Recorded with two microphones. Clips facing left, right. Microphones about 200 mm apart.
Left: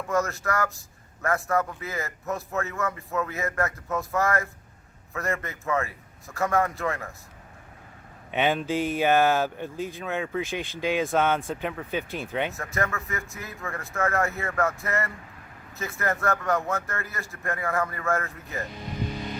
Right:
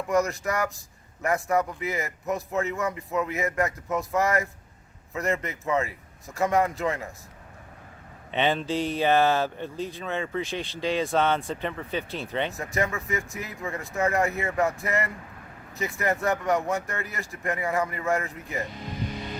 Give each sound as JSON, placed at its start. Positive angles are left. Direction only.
{"t": 0.1, "sound": "a man's voice", "side_deg": -15}
{"t": 8.3, "sound": "speech", "side_deg": 5}
{"t": 10.8, "sound": "speech", "side_deg": 15}
{"t": 11.0, "sound": "speech", "side_deg": 5}
{"t": 12.5, "sound": "a man's voice", "side_deg": -15}